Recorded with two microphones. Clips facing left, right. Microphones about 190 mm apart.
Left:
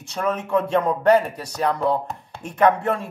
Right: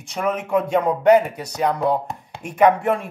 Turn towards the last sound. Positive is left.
turn(degrees=-15)  # may be behind; listen again after turning